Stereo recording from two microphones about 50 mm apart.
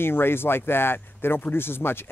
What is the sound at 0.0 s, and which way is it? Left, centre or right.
Speech, left.